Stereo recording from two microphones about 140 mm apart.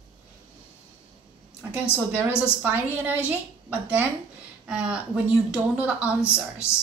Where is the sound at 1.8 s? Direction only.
15° left (ahead or behind).